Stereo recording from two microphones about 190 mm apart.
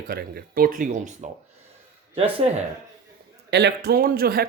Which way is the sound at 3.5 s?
60° right (ahead or behind).